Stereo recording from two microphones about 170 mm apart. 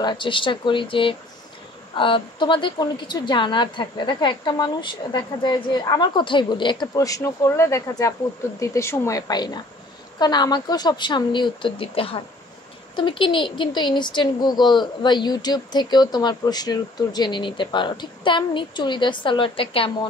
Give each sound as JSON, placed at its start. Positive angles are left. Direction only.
{"t": 0.0, "sound": "a woman's voice", "side_deg": 30}